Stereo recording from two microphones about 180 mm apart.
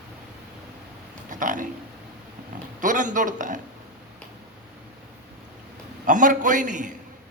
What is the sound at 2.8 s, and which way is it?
Speech, 45° right (ahead or behind).